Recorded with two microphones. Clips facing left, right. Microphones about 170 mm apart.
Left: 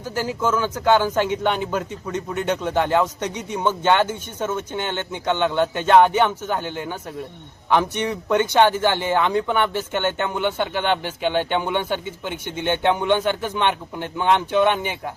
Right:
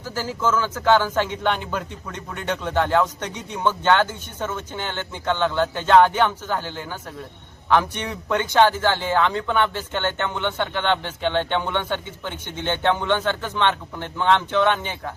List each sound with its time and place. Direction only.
0.0 s speech: 10° left (ahead or behind)
7.7 s speech: 10° left (ahead or behind)